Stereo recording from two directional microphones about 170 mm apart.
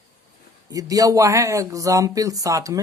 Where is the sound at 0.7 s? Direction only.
20° right (ahead or behind).